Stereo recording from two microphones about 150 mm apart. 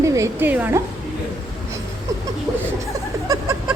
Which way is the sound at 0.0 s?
20° right (ahead or behind).